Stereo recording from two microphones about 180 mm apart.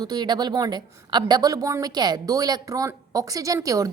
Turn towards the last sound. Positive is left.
turn(degrees=-20)  # may be behind; listen again after turning